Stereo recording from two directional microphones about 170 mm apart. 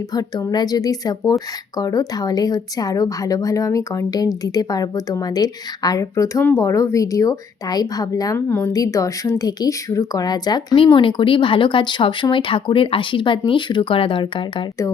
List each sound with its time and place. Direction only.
0.1 s speech: 20° left (ahead or behind)